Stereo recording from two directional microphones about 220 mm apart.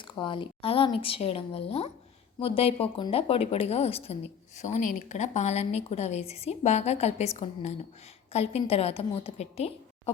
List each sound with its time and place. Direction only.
0.0 s a woman's voice: 20° left (ahead or behind)